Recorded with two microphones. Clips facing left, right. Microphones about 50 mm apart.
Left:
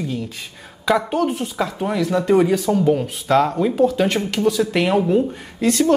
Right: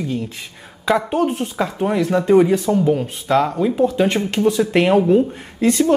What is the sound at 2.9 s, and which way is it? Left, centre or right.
Speech, centre.